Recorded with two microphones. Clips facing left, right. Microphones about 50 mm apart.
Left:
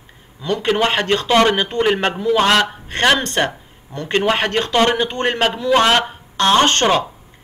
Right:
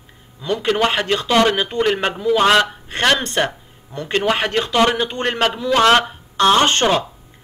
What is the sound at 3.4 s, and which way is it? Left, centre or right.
A man's voice, centre.